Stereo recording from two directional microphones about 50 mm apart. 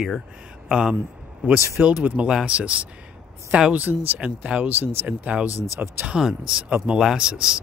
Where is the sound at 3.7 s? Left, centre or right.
Right.